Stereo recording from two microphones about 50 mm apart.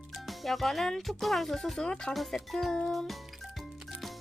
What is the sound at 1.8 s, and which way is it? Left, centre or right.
Speech, centre.